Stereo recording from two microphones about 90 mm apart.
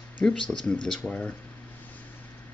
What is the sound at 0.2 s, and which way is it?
Speech, 10° left (ahead or behind).